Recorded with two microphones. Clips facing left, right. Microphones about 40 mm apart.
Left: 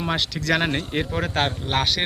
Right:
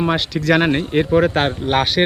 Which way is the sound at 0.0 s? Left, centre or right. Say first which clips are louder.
Right 6 dB; centre.